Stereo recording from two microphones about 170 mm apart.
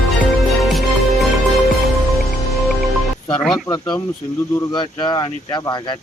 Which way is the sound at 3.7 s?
20° left (ahead or behind).